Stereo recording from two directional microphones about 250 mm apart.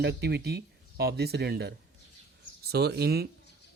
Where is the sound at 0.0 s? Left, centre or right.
Right.